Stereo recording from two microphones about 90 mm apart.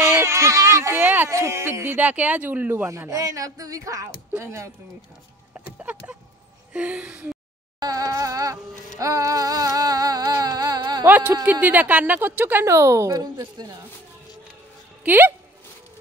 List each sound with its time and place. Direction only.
0.0 s a sound: 30° right (ahead or behind)
1.3 s a woman's voice: 30° right (ahead or behind)
2.0 s speech: 15° right (ahead or behind)
2.9 s speech: 35° right (ahead or behind)
5.8 s speech: 15° right (ahead or behind)
7.8 s speech: 40° right (ahead or behind)
9.0 s a sound: 40° right (ahead or behind)
10.4 s music: 45° right (ahead or behind)
11.1 s a woman's voice: 20° right (ahead or behind)
12.6 s speech: 35° right (ahead or behind)
13.4 s speech: 50° right (ahead or behind)
15.0 s a woman's voice: 25° right (ahead or behind)